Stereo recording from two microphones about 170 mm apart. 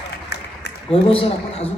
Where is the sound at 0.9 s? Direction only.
35° left (ahead or behind).